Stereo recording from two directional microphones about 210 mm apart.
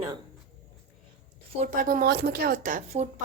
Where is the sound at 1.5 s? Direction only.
40° right (ahead or behind).